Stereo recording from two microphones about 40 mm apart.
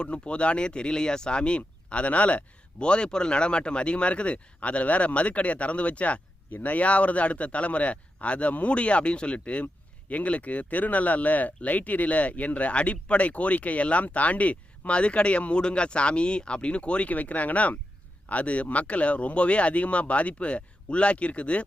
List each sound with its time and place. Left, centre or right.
0.0 s speech: left